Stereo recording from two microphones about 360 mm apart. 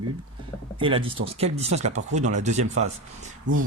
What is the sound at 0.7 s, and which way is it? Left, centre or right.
Speech, centre.